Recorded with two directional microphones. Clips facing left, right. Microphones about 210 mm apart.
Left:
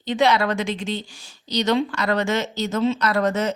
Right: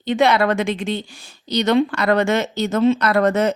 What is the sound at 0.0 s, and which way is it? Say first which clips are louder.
A woman's voice: right 3 dB; 55° right (ahead or behind).